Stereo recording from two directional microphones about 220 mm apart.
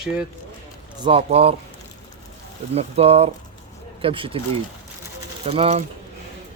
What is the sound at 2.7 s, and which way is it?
Speech, 30° right (ahead or behind).